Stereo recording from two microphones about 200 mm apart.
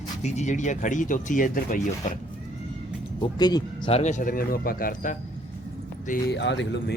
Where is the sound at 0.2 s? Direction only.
35° left (ahead or behind).